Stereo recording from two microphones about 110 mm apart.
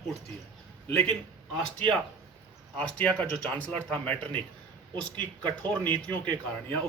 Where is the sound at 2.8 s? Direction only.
15° left (ahead or behind).